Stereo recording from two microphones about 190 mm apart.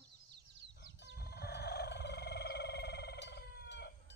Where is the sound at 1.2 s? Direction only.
55° left (ahead or behind).